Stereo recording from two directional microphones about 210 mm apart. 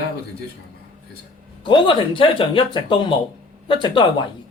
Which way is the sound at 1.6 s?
25° left (ahead or behind).